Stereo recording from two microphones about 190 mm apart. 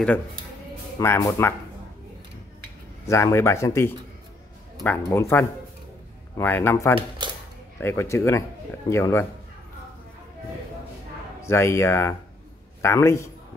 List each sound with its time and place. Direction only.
0.9 s speech: 15° left (ahead or behind)
3.1 s speech: 15° left (ahead or behind)
7.2 s a sound: 25° right (ahead or behind)
7.8 s speech: 15° left (ahead or behind)
11.4 s speech: 15° left (ahead or behind)